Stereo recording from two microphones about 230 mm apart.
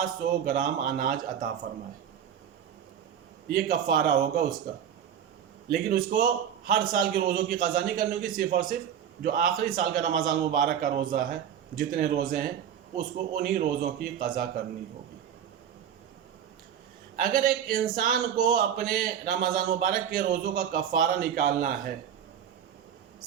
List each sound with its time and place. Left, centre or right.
0.0 s speech: right
3.5 s speech: right
5.7 s speech: right
17.2 s speech: right